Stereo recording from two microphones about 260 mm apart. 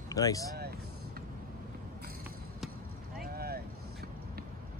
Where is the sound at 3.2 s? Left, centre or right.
Right.